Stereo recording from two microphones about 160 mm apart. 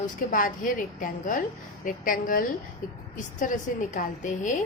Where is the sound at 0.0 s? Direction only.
55° left (ahead or behind).